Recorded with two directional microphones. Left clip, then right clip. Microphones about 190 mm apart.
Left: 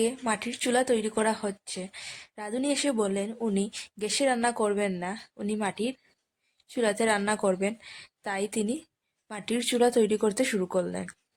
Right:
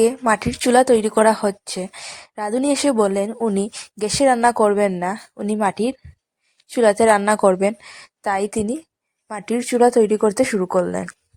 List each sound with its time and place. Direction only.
0.0 s speech: 35° right (ahead or behind)